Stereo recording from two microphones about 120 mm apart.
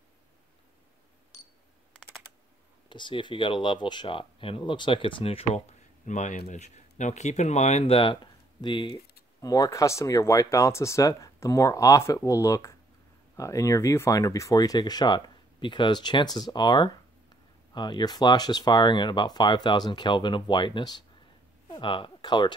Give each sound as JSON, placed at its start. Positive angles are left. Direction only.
{"t": 2.9, "sound": "speech", "side_deg": 40}
{"t": 9.4, "sound": "speech", "side_deg": 30}